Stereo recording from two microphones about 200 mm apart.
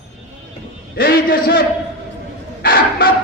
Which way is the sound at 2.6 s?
45° left (ahead or behind).